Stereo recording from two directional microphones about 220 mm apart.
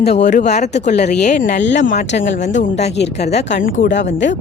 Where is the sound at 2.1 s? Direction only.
40° left (ahead or behind).